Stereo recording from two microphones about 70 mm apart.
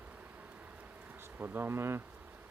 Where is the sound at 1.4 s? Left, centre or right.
Right.